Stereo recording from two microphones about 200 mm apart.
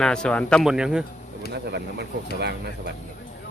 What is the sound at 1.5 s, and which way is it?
Speech, 55° right (ahead or behind).